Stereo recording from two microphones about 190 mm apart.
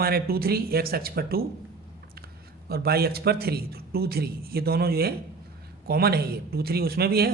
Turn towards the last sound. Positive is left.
turn(degrees=-55)  # may be behind; listen again after turning